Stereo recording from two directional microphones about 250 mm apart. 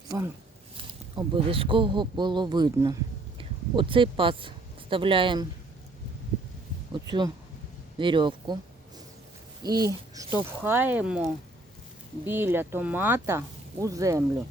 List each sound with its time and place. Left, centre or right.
0.1 s a man's voice: centre
7.9 s speech: centre
9.6 s speech: centre